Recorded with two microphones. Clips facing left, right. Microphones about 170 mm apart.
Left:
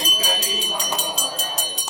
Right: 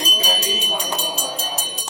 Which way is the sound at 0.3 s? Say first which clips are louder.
Right 3 dB; 10° right (ahead or behind).